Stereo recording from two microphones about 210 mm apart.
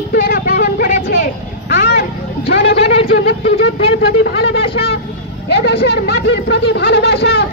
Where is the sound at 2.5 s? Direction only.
55° left (ahead or behind).